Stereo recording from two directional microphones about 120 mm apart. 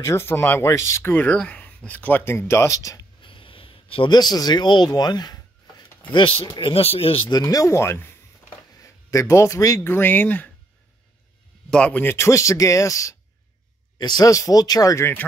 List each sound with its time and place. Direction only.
0.0 s speech: 20° left (ahead or behind)
3.2 s a sound: 45° left (ahead or behind)
6.1 s speech: 45° left (ahead or behind)
7.2 s speech: 30° left (ahead or behind); by 10.5 s 15° left (ahead or behind)
11.7 s speech: 10° left (ahead or behind)